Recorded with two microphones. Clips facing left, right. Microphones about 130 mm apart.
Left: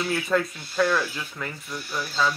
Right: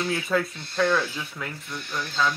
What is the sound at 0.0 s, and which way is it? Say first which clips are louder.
Speech: left 1 dB; centre (ahead or behind).